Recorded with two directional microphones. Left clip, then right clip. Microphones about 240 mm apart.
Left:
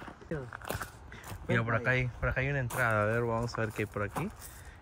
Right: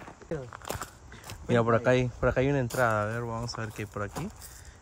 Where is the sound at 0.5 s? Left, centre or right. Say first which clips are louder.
Right 1 dB; centre.